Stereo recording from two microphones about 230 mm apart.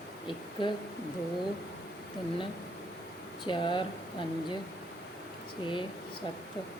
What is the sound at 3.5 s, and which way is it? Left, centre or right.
Speech, left.